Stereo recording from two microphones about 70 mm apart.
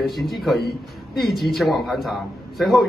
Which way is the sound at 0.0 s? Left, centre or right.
Centre.